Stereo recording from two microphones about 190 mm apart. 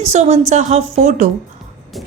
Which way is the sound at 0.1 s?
35° right (ahead or behind).